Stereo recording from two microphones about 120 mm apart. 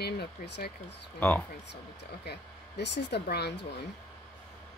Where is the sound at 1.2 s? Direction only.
15° left (ahead or behind).